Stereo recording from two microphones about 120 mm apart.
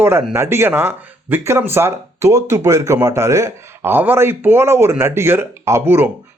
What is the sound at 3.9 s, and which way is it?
Speech, 15° right (ahead or behind).